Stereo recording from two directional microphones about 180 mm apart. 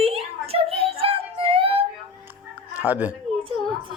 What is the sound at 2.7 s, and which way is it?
Speech, 10° right (ahead or behind).